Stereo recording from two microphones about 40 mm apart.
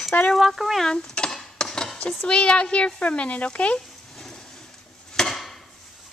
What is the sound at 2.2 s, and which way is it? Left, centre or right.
Speech, left.